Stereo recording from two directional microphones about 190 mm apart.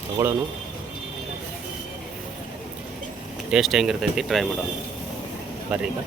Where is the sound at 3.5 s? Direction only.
Centre (ahead or behind).